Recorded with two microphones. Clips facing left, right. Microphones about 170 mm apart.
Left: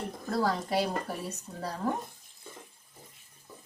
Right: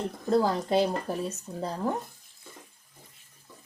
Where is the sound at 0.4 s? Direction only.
20° right (ahead or behind).